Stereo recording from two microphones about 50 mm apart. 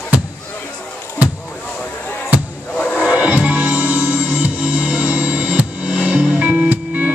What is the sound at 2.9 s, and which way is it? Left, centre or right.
Music, right.